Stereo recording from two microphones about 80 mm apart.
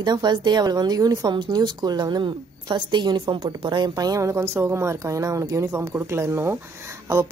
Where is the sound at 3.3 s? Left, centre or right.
Right.